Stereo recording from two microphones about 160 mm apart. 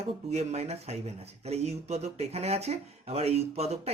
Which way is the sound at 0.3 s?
45° right (ahead or behind).